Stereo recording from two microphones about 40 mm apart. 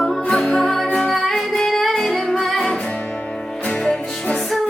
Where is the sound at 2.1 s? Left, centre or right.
Left.